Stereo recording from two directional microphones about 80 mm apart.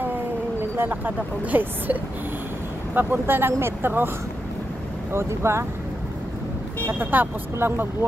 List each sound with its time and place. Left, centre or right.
0.7 s speech: right
5.1 s speech: right
6.9 s speech: right